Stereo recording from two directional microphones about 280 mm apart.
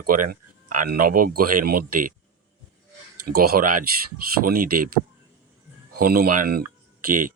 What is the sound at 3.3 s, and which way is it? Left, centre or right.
Speech, right.